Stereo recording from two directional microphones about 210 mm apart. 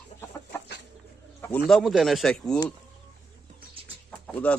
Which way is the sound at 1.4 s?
5° left (ahead or behind).